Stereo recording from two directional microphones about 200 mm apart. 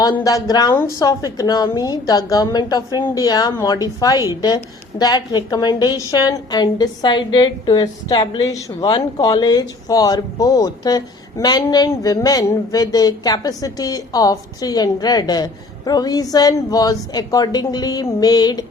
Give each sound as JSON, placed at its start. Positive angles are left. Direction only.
{"t": 0.0, "sound": "a woman's voice", "side_deg": 15}